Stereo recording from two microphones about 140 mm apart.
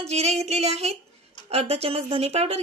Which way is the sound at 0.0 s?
50° right (ahead or behind).